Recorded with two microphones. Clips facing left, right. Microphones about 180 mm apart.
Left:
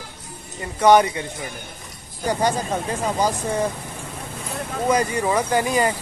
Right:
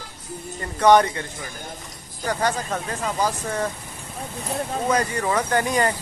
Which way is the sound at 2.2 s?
15° left (ahead or behind).